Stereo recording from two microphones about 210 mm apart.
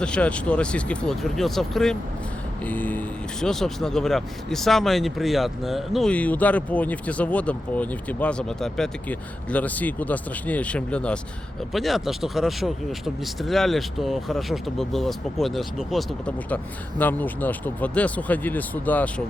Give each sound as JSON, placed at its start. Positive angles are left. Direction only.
{"t": 0.0, "sound": "speech", "side_deg": 5}